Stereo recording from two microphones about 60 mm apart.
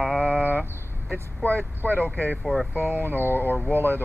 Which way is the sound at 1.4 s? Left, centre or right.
Left.